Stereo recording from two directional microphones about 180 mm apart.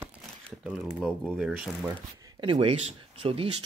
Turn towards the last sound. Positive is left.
turn(degrees=-30)  # may be behind; listen again after turning